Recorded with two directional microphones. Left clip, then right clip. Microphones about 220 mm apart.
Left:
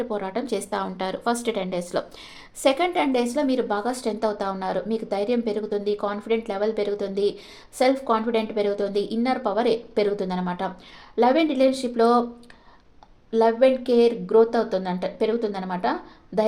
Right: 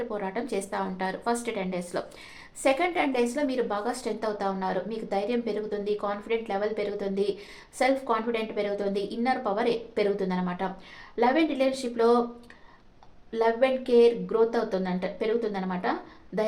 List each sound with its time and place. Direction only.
0.1 s a woman's voice: 45° left (ahead or behind)
13.3 s a woman's voice: 45° left (ahead or behind)